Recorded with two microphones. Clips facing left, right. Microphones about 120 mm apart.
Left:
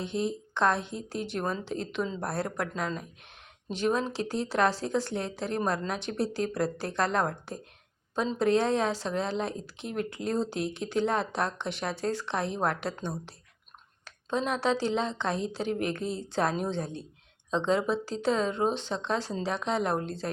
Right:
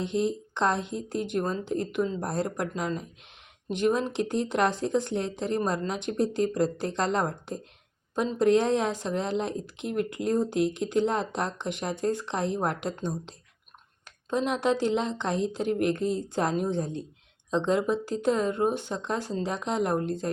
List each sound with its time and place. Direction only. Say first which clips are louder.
0.3 s speech: even; 20° right (ahead or behind)
6.1 s speech: right 5 dB; 75° left (ahead or behind)
6.4 s a woman's voice: right 4 dB; 15° right (ahead or behind)